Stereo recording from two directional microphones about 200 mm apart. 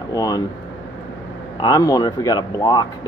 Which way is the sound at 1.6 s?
15° left (ahead or behind).